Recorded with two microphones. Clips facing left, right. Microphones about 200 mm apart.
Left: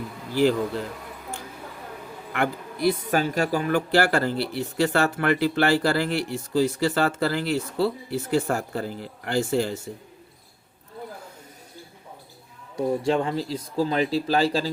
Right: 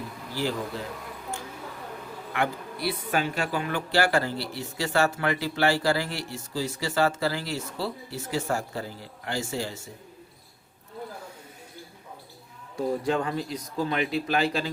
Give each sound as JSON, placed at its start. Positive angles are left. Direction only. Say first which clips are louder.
{"t": 2.3, "sound": "speech", "louder": "left 2 dB", "side_deg": 50}
{"t": 12.7, "sound": "speech", "louder": "left 3 dB", "side_deg": 25}